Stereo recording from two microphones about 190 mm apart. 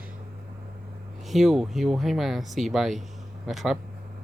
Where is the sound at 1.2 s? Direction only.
Centre (ahead or behind).